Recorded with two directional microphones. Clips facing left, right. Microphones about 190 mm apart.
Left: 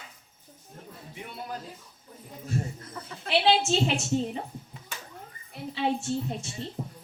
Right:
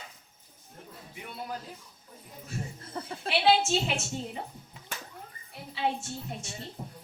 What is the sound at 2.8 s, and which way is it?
Speech, 30° right (ahead or behind).